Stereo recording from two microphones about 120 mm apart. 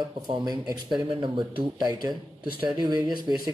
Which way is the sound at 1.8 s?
35° right (ahead or behind).